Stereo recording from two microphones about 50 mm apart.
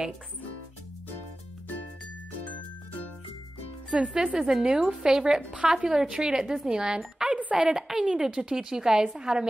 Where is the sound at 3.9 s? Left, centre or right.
Centre.